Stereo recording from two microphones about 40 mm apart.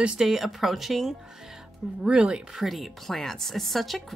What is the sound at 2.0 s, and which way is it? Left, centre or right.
Speech, right.